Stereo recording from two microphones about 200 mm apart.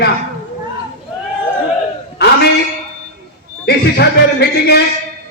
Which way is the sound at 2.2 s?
55° left (ahead or behind).